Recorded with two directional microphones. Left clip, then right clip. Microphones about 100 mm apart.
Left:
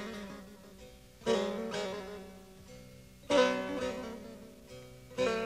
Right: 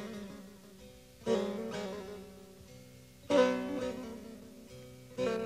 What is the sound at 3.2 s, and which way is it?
Music, 55° left (ahead or behind).